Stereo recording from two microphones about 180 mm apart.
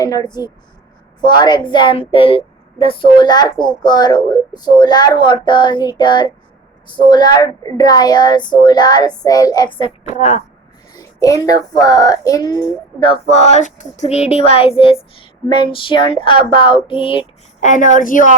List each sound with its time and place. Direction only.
0.0 s a child's voice: 20° left (ahead or behind); by 10.4 s 35° left (ahead or behind)
10.9 s a child's voice: 20° left (ahead or behind)
17.6 s a woman's voice: 45° left (ahead or behind)